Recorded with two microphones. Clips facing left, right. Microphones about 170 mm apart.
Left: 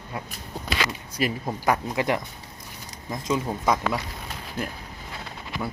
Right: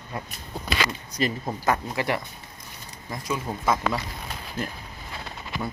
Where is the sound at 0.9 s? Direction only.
5° left (ahead or behind).